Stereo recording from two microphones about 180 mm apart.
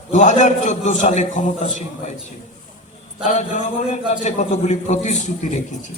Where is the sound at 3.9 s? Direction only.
40° left (ahead or behind).